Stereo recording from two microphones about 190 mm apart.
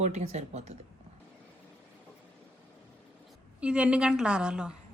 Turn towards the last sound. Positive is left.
turn(degrees=-5)  # may be behind; listen again after turning